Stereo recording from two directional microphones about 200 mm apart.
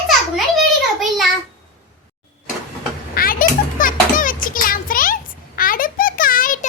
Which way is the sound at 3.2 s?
45° left (ahead or behind).